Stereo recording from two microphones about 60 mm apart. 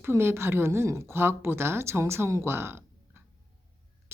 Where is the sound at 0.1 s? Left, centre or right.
Right.